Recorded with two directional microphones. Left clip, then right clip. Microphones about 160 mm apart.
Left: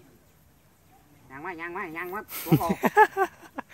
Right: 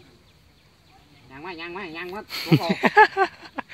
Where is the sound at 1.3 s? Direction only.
30° right (ahead or behind).